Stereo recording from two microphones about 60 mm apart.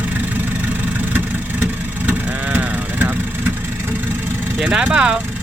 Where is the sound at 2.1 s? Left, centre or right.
Right.